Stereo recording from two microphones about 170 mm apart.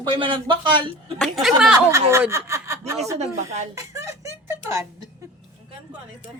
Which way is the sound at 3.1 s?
40° right (ahead or behind).